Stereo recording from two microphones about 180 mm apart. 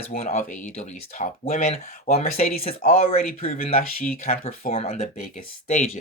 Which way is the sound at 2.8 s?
50° left (ahead or behind).